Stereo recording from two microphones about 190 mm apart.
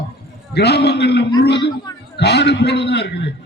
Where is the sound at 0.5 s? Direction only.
60° left (ahead or behind).